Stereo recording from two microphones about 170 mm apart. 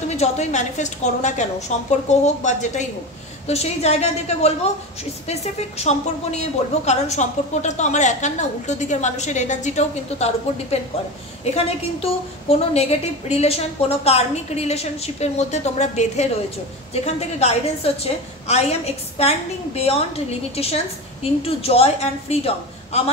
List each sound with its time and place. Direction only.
0.2 s a woman's voice: 40° left (ahead or behind)